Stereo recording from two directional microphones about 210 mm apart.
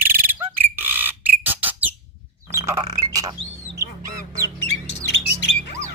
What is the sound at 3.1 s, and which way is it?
Squawk, 15° right (ahead or behind).